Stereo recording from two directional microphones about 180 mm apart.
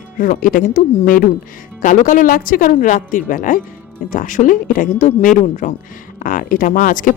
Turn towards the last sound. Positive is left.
turn(degrees=50)  # may be behind; listen again after turning